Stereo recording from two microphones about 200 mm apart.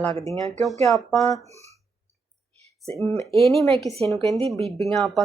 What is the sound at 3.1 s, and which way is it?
Speech, 30° right (ahead or behind).